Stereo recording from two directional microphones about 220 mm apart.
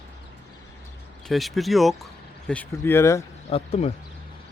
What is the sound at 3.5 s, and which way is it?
Speech, 30° left (ahead or behind).